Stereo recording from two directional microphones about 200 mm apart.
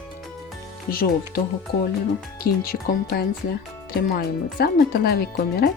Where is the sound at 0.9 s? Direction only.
50° left (ahead or behind).